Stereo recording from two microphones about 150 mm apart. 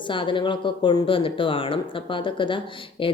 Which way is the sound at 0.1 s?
35° left (ahead or behind).